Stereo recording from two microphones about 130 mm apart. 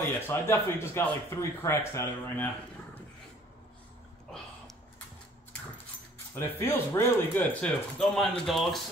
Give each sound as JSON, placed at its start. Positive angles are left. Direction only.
{"t": 0.3, "sound": "speech", "side_deg": 20}
{"t": 6.3, "sound": "speech", "side_deg": 20}